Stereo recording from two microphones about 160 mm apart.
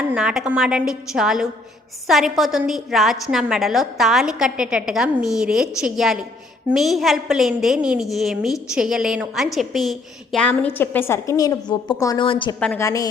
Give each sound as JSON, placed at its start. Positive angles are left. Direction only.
{"t": 0.1, "sound": "a woman's voice", "side_deg": -5}
{"t": 12.5, "sound": "a woman's voice", "side_deg": 5}
{"t": 12.8, "sound": "a woman's voice", "side_deg": 20}